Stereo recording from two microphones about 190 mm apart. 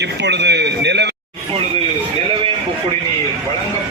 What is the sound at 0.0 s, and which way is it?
A man's voice, 65° right (ahead or behind).